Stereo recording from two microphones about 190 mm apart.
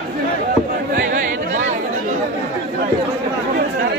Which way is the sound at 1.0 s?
40° right (ahead or behind).